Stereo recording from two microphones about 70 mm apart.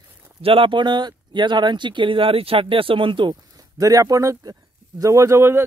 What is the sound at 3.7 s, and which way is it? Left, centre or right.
Speech, right.